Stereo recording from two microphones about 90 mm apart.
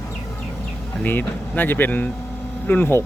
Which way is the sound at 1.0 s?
20° left (ahead or behind).